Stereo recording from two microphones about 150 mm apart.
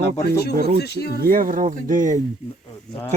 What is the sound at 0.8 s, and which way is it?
Speech, 90° left.